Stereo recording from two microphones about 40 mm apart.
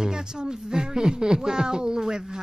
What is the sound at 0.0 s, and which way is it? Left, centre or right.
Speech, centre.